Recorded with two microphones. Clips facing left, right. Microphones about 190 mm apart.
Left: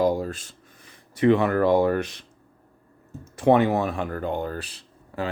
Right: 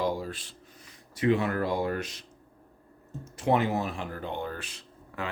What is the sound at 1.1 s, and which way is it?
Speech, 60° left (ahead or behind).